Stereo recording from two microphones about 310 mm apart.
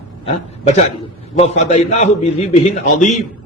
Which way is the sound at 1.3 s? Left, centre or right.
Left.